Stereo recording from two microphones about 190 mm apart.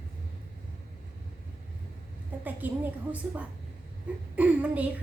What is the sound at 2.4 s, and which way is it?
A woman's voice, 10° right (ahead or behind).